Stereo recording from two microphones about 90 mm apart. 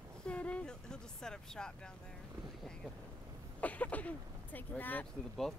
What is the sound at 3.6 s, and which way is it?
Speech, 15° left (ahead or behind).